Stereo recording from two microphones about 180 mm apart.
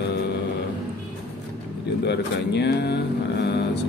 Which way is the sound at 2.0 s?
70° left (ahead or behind).